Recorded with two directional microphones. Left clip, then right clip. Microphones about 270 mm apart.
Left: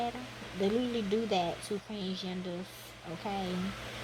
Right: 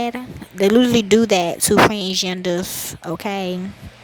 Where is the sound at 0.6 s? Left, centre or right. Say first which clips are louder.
Right 17 dB; right.